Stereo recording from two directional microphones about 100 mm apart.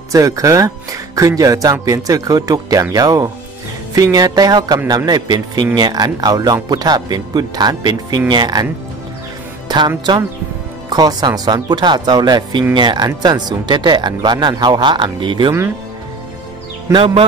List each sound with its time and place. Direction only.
0.1 s speech: 35° right (ahead or behind)
9.7 s speech: 45° right (ahead or behind)
16.9 s speech: 70° right (ahead or behind)